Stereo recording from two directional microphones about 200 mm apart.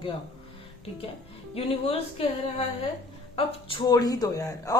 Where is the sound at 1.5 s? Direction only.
30° left (ahead or behind).